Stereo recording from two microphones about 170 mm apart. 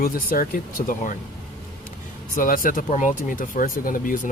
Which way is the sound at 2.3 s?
55° left (ahead or behind).